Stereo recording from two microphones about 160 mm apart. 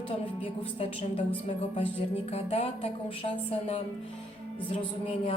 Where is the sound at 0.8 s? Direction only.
35° left (ahead or behind).